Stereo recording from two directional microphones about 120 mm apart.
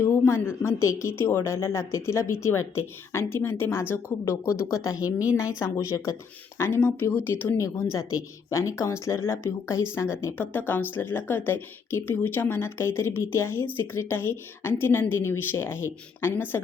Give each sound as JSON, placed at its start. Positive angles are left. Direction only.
{"t": 0.0, "sound": "a woman's voice", "side_deg": 25}